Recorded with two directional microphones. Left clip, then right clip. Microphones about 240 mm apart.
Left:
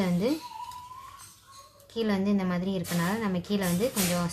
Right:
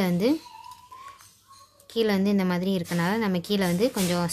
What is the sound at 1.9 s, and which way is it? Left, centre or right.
Speech, right.